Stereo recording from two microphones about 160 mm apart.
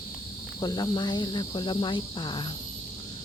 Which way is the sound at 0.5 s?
25° left (ahead or behind).